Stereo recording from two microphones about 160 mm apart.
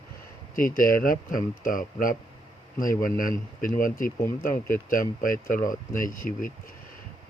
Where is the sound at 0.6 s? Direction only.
60° left (ahead or behind).